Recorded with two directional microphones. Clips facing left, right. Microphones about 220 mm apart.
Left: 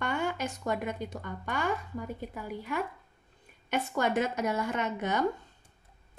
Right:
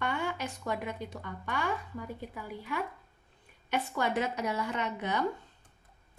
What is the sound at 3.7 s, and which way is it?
A woman's voice, 45° left (ahead or behind).